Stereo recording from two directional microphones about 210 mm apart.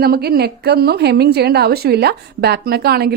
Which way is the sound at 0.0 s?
50° right (ahead or behind).